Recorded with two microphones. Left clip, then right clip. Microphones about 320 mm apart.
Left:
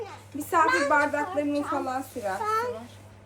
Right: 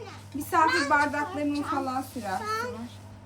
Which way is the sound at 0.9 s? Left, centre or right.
Centre.